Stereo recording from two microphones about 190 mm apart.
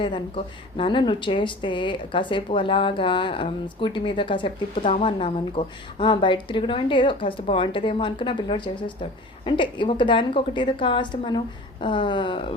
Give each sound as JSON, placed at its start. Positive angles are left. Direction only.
{"t": 0.0, "sound": "a woman's voice", "side_deg": 25}